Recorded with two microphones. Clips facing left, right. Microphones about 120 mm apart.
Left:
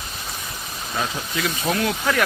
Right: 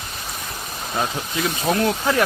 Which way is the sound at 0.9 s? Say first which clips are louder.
Right 2 dB; 25° right (ahead or behind).